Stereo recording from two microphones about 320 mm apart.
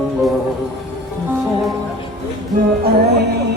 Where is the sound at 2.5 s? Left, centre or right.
Right.